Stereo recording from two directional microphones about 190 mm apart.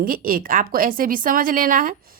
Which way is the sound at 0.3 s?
50° right (ahead or behind).